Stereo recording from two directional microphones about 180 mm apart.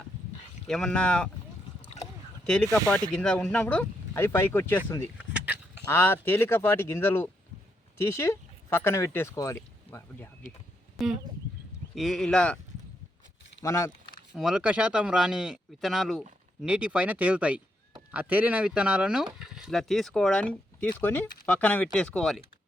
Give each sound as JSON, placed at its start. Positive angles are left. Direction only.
{"t": 0.7, "sound": "speech", "side_deg": 5}
{"t": 2.4, "sound": "speech", "side_deg": 5}
{"t": 5.3, "sound": "a sound", "side_deg": -10}
{"t": 5.9, "sound": "speech", "side_deg": 10}
{"t": 10.9, "sound": "speech", "side_deg": 0}
{"t": 13.6, "sound": "speech", "side_deg": 15}
{"t": 14.3, "sound": "speech", "side_deg": -5}